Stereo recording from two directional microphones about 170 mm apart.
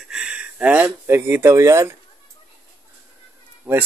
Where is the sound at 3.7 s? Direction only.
5° right (ahead or behind).